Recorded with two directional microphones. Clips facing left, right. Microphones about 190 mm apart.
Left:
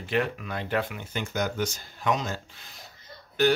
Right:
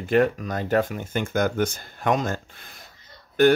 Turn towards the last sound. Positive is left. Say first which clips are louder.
# right 6 dB
turn(degrees=-55)  # may be behind; listen again after turning